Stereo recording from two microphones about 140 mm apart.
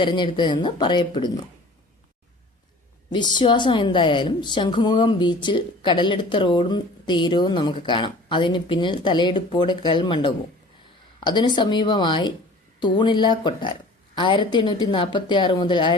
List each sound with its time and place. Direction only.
0.0 s a woman's voice: 35° left (ahead or behind)
3.1 s a woman's voice: 30° left (ahead or behind)